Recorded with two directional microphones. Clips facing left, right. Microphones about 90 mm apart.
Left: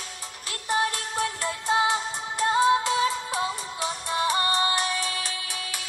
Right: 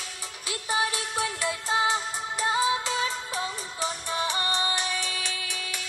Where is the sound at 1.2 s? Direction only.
Centre (ahead or behind).